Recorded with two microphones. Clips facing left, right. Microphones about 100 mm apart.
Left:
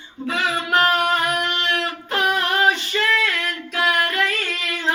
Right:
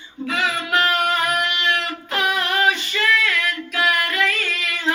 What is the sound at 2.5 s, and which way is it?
Female singing, 30° left (ahead or behind).